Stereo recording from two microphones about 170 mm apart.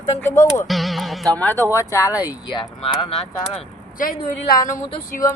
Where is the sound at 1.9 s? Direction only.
15° left (ahead or behind); by 3.6 s 35° left (ahead or behind).